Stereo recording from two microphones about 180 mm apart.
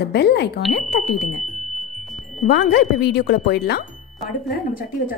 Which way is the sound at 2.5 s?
65° left (ahead or behind).